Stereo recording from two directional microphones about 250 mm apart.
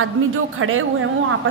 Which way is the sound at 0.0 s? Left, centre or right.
Right.